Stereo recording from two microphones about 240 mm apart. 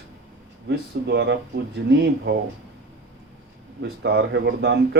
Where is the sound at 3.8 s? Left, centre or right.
Right.